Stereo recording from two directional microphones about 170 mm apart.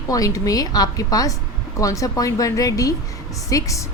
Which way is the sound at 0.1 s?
20° left (ahead or behind).